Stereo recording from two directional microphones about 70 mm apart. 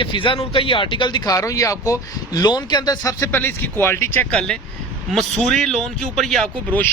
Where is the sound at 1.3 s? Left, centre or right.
Left.